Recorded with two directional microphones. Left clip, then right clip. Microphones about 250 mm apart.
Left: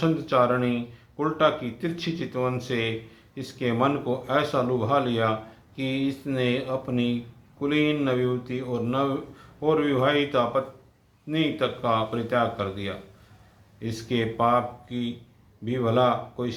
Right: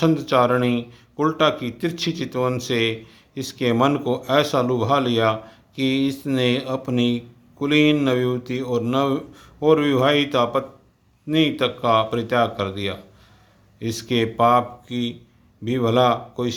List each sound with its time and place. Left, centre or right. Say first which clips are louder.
0.0 s speech: right 4 dB; right